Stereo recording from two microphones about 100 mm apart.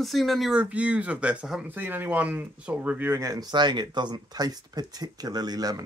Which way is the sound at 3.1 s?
35° right (ahead or behind).